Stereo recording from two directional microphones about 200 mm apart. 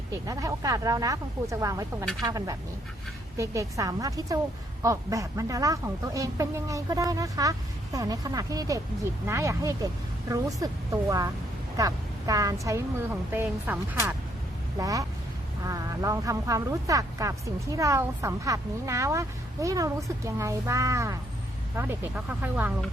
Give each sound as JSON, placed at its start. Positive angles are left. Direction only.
{"t": 0.1, "sound": "speech", "side_deg": -15}
{"t": 11.8, "sound": "a woman's voice", "side_deg": -20}